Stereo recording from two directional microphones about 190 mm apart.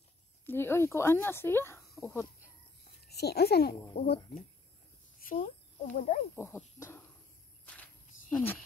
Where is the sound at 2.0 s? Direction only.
Centre (ahead or behind).